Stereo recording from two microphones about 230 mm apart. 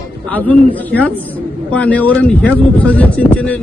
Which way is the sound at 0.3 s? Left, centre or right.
Centre.